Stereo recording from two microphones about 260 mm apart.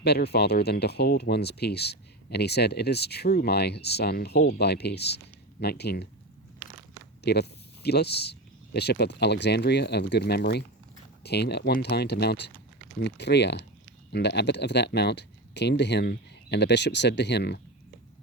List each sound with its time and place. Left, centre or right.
0.0 s speech: left
7.3 s speech: left